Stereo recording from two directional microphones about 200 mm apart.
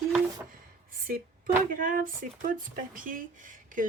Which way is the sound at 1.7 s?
45° right (ahead or behind).